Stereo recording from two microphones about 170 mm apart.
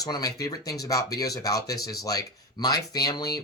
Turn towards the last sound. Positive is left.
turn(degrees=20)  # may be behind; listen again after turning